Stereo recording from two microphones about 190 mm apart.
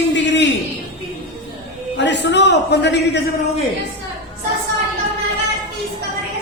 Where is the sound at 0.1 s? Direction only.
70° left (ahead or behind).